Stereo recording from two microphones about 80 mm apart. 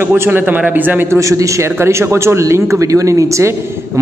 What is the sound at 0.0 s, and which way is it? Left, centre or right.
A man's voice, right.